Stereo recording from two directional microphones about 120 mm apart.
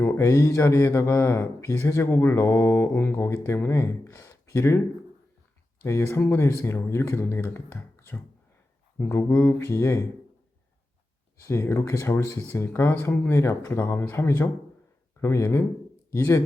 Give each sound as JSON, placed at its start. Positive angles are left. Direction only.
{"t": 0.0, "sound": "speech", "side_deg": 20}
{"t": 5.8, "sound": "speech", "side_deg": 25}
{"t": 11.4, "sound": "speech", "side_deg": 25}